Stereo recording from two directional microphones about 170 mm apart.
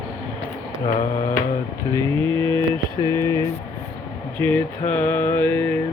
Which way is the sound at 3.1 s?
15° left (ahead or behind).